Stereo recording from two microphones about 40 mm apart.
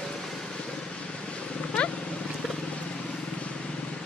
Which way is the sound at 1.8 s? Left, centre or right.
Left.